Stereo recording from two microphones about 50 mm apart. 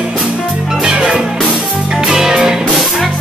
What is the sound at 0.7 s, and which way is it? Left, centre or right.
Music, centre.